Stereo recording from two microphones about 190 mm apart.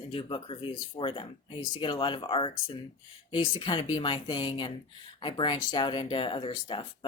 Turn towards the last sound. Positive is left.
turn(degrees=25)  # may be behind; listen again after turning